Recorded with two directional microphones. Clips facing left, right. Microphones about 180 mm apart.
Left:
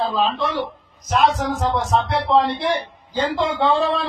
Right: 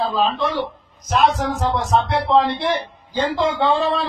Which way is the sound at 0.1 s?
Centre (ahead or behind).